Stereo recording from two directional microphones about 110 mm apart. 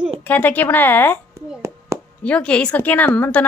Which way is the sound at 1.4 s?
30° right (ahead or behind).